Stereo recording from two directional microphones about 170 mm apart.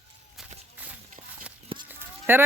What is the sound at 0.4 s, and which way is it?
Walk, centre (ahead or behind).